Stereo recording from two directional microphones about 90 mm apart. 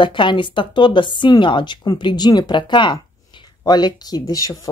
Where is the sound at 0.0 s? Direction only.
65° left (ahead or behind).